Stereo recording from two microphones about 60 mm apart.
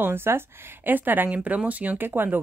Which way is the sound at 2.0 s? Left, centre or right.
Right.